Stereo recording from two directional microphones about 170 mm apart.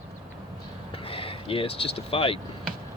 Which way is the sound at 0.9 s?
35° left (ahead or behind).